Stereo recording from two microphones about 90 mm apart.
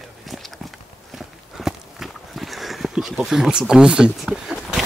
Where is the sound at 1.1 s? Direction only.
5° right (ahead or behind).